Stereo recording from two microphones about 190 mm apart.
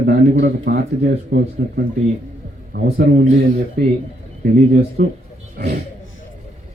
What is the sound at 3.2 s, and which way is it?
Speech, 45° right (ahead or behind).